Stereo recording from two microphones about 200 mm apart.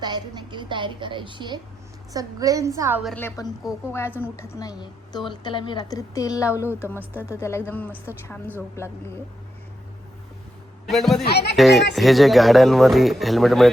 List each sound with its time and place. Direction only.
0.0 s a woman's voice: 20° right (ahead or behind)
3.2 s a woman's voice: 15° left (ahead or behind)
7.0 s a woman's voice: 10° right (ahead or behind)
7.3 s a woman's voice: 15° left (ahead or behind)
10.8 s speech: centre (ahead or behind)
11.3 s speech: 55° left (ahead or behind)
11.5 s speech: centre (ahead or behind)